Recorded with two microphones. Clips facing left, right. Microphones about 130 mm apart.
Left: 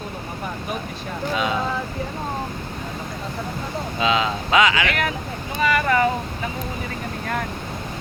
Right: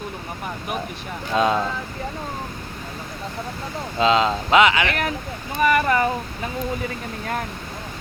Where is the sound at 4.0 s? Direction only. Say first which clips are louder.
Right 4 dB; 30° right (ahead or behind).